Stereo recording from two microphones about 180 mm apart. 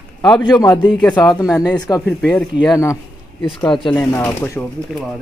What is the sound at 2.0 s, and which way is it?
Speech, 5° left (ahead or behind).